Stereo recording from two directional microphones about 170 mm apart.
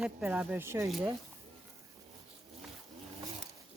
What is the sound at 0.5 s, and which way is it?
Speech, 15° right (ahead or behind).